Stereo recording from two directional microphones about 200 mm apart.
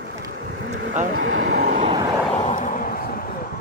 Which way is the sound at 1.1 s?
80° right.